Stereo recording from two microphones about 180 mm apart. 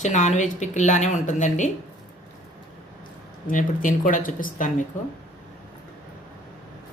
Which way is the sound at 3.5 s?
45° left (ahead or behind).